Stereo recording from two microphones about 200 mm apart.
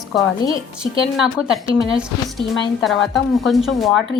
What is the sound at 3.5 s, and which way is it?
Speech, centre (ahead or behind).